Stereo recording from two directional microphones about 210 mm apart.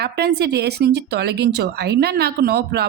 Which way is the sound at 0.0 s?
50° right (ahead or behind).